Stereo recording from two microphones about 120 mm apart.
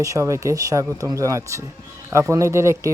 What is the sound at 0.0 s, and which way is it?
Speech, 25° right (ahead or behind).